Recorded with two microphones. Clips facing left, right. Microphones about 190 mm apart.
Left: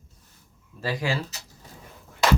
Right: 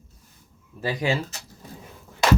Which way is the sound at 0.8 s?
20° right (ahead or behind).